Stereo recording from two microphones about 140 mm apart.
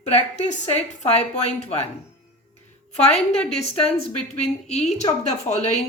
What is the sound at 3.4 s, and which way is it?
Speech, 45° left (ahead or behind).